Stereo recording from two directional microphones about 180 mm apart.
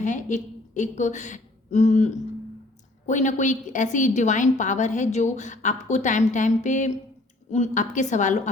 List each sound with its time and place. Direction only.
0.0 s a woman's voice: 45° left (ahead or behind)